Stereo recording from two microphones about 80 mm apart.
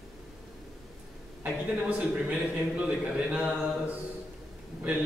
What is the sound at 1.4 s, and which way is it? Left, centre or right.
A man's voice, centre.